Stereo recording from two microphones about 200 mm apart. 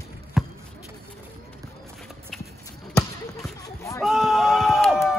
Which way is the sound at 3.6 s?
15° left (ahead or behind).